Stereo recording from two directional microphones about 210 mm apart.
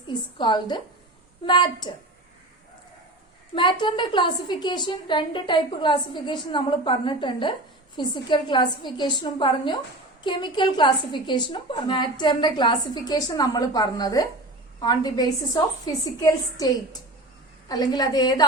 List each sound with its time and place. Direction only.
0.1 s a woman's voice: 20° left (ahead or behind)
3.5 s a woman's voice: 25° left (ahead or behind)